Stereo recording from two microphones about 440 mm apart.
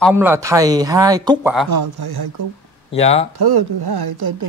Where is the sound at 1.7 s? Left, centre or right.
Right.